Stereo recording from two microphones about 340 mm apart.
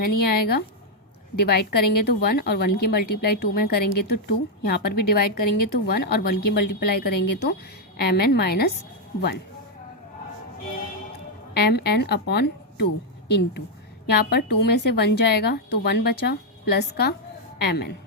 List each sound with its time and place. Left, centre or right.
0.0 s a woman's voice: left
11.5 s a woman's voice: left